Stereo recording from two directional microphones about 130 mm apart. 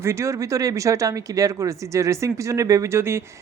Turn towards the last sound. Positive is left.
turn(degrees=-20)  # may be behind; listen again after turning